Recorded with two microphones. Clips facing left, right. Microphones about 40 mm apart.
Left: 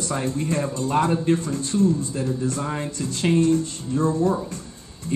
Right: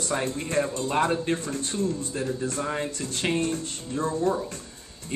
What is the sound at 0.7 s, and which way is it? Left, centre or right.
Speech, right.